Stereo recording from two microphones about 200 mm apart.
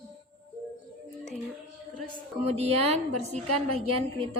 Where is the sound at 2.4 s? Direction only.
30° right (ahead or behind).